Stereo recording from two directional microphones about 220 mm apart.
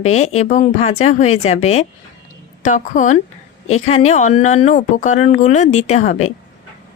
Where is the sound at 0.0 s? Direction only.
30° left (ahead or behind).